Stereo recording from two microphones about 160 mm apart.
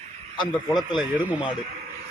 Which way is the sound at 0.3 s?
25° left (ahead or behind).